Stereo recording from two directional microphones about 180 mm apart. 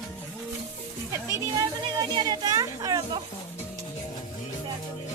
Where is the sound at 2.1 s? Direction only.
25° right (ahead or behind).